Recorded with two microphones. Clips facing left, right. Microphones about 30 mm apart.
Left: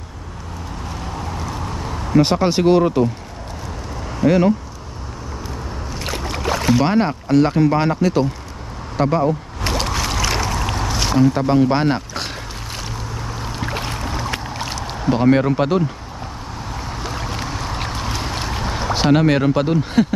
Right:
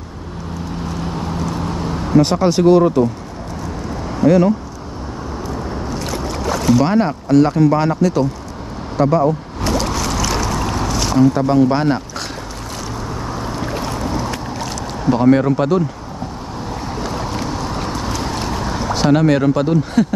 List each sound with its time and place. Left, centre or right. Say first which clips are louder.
2.1 s speech: right 2 dB; centre
4.3 s speech: right 2 dB; centre
5.9 s speech: left 1 dB; left
9.7 s a sound: right 2 dB; left
13.6 s boat: right 1 dB; left
15.0 s speech: right 2 dB; centre
16.9 s boat: right 4 dB; centre
17.9 s boat: right 3 dB; left